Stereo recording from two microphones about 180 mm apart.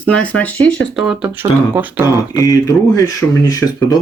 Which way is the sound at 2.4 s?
20° left (ahead or behind).